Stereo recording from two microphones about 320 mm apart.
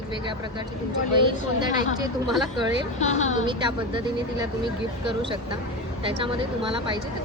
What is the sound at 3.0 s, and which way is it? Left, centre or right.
Speech, left.